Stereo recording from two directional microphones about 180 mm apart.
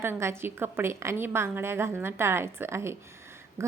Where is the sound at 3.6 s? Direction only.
15° right (ahead or behind).